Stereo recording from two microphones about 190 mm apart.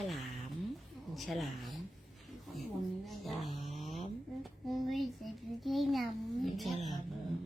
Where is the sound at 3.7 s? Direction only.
35° left (ahead or behind).